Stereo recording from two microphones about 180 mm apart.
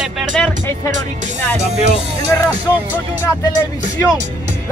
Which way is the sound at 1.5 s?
35° right (ahead or behind).